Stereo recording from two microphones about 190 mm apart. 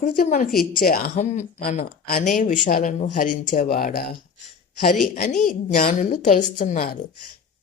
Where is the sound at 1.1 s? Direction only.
35° left (ahead or behind).